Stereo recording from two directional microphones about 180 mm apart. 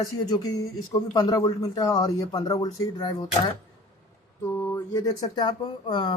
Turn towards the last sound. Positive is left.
turn(degrees=25)  # may be behind; listen again after turning